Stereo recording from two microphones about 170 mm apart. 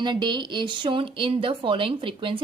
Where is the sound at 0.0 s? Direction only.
25° right (ahead or behind).